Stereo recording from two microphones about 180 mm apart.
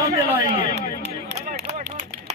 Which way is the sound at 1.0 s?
65° right (ahead or behind).